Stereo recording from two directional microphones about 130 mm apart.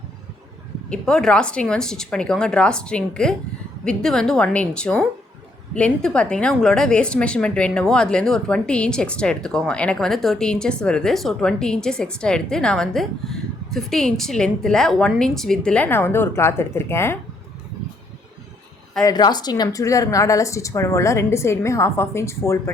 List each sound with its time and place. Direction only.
0.9 s a woman's voice: 5° left (ahead or behind)
19.0 s speech: 30° left (ahead or behind)